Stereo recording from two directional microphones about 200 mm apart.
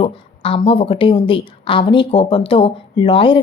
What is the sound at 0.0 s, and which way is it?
A woman's voice, 30° left (ahead or behind).